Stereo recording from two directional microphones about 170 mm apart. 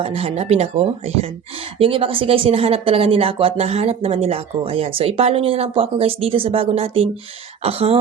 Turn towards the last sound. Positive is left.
turn(degrees=-35)  # may be behind; listen again after turning